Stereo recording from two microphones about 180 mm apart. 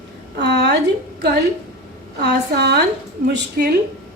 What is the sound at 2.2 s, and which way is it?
A woman's voice, 65° right (ahead or behind).